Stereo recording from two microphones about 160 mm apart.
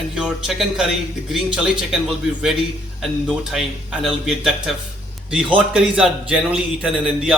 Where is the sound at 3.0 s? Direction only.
Centre (ahead or behind).